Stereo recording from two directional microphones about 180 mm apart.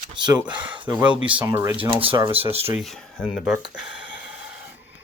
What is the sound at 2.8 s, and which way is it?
Speech, centre (ahead or behind).